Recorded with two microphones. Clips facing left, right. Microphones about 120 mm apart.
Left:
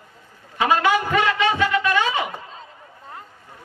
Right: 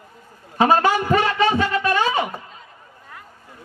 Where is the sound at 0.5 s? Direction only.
40° right (ahead or behind).